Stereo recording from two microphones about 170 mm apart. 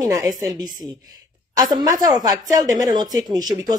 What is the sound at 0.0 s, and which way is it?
A woman's voice, 20° right (ahead or behind).